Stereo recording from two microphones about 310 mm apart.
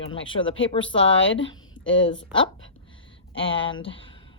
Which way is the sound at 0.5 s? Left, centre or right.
Left.